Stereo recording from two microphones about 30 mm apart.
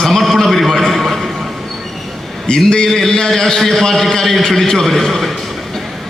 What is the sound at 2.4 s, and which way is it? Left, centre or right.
Speech, left.